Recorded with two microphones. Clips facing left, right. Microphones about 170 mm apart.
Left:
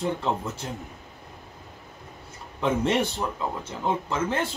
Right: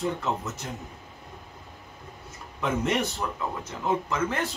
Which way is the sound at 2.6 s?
30° left (ahead or behind).